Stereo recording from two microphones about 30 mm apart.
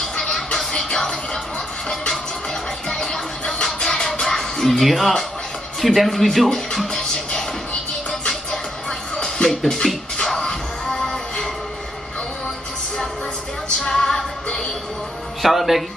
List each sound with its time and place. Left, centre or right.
0.2 s music: left
2.9 s music: centre
4.8 s speech: centre
9.1 s music: left
9.5 s speech: centre
10.2 s music: centre
13.7 s music: left
15.4 s music: centre